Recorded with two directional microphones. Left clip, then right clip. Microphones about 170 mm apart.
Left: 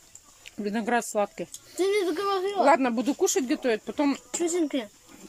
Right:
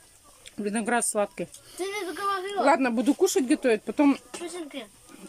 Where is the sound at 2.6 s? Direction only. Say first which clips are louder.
Even; 5° right (ahead or behind).